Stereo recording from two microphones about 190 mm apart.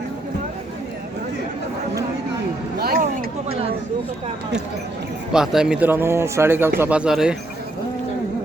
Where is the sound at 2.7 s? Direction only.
50° right (ahead or behind).